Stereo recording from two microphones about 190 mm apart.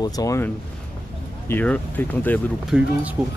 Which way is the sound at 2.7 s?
5° right (ahead or behind).